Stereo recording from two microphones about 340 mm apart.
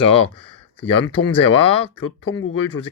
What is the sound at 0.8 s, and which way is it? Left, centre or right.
Speech, centre.